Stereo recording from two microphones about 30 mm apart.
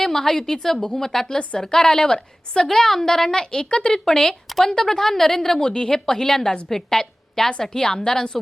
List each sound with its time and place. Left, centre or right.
0.0 s a woman's voice: centre
2.7 s a woman's voice: centre
3.2 s a woman's voice: left
5.6 s a woman's voice: left